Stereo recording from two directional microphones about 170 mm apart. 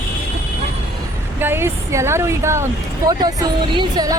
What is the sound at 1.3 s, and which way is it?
Speech, 15° right (ahead or behind).